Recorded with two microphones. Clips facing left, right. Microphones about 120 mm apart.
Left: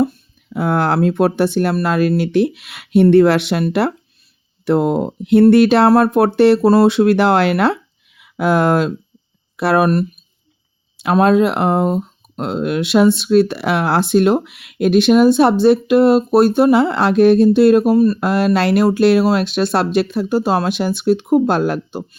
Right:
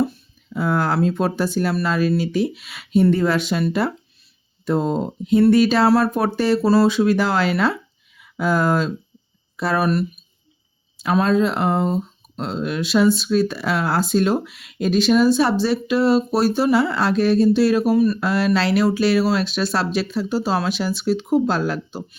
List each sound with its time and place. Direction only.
0.0 s speech: 55° left (ahead or behind)
17.9 s speech: 35° left (ahead or behind)
18.2 s speech: 50° left (ahead or behind)